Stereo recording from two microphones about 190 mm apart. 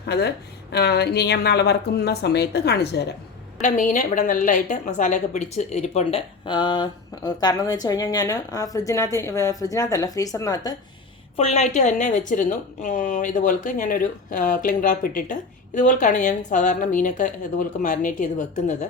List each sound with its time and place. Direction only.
0.1 s a woman's voice: 60° left (ahead or behind)
3.6 s a woman's voice: 40° left (ahead or behind); by 10.8 s 20° left (ahead or behind)
11.3 s a woman's voice: 35° left (ahead or behind)